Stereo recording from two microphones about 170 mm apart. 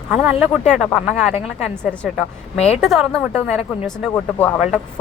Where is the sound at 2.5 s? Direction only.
40° left (ahead or behind).